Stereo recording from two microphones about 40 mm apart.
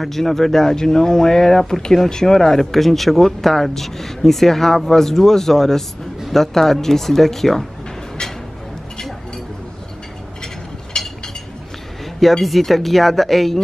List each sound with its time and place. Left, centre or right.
0.0 s speech: centre
10.9 s a sound: centre
12.2 s speech: centre